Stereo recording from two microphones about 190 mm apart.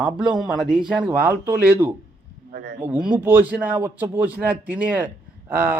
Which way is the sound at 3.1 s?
10° right (ahead or behind).